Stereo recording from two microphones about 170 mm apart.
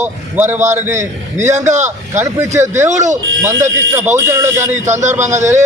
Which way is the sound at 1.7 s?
45° right (ahead or behind).